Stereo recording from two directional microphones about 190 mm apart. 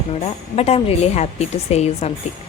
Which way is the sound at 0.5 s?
30° left (ahead or behind).